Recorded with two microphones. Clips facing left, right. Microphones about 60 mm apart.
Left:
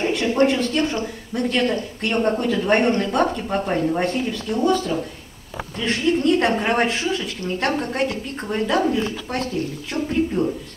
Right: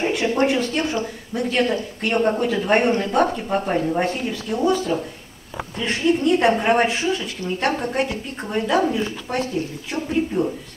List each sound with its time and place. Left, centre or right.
0.0 s a sound: centre
0.4 s a woman's voice: centre
5.9 s a woman's voice: centre
6.5 s a woman's voice: centre